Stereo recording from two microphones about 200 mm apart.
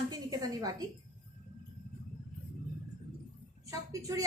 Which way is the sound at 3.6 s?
15° right (ahead or behind).